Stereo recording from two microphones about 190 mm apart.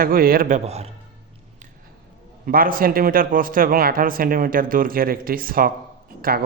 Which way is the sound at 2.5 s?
50° right (ahead or behind).